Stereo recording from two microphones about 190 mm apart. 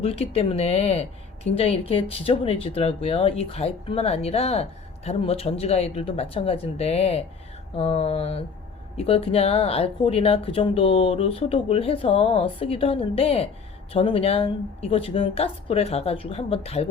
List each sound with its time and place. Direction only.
0.0 s speech: 30° left (ahead or behind)